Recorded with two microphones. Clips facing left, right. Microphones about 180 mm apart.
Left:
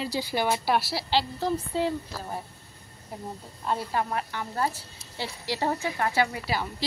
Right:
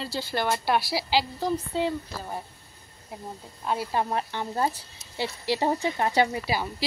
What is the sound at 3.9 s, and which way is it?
Speech, 25° right (ahead or behind).